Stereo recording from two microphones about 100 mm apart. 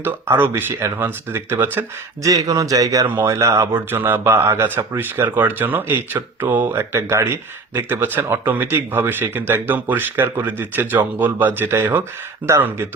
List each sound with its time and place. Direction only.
0.0 s speech: 20° right (ahead or behind)
2.2 s speech: 35° right (ahead or behind)